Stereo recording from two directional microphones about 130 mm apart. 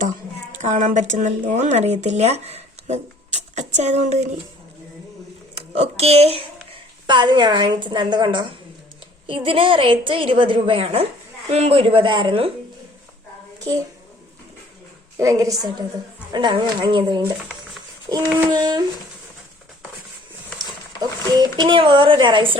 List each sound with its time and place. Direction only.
0.6 s speech: 70° right (ahead or behind)
5.5 s a child's voice: 50° right (ahead or behind)
7.1 s a woman's voice: 40° right (ahead or behind)
15.2 s a woman's voice: 25° right (ahead or behind)
16.3 s speech: 35° right (ahead or behind)
18.1 s child singing: 30° right (ahead or behind)
18.4 s speech: 35° right (ahead or behind)
21.0 s speech: 35° right (ahead or behind)